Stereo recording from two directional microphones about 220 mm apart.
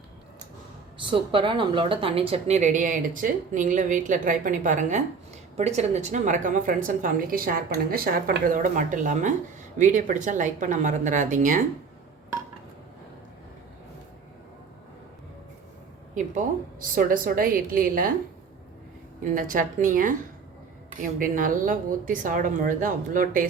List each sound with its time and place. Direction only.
0.9 s speech: 25° right (ahead or behind)
16.9 s speech: 40° right (ahead or behind)
19.2 s speech: 40° right (ahead or behind)